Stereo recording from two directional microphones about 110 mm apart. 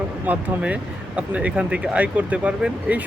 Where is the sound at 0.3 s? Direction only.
10° right (ahead or behind).